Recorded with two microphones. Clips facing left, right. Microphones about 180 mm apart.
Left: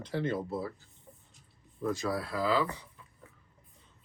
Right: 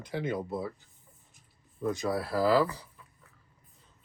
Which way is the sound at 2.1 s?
30° right (ahead or behind).